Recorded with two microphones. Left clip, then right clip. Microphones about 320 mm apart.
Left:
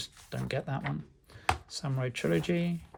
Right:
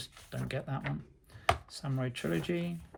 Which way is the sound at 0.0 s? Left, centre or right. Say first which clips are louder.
Left 3 dB; centre.